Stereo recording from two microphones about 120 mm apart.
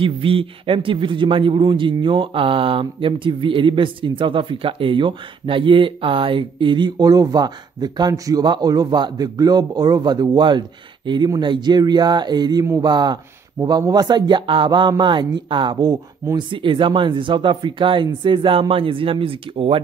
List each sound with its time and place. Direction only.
0.0 s speech: 50° right (ahead or behind)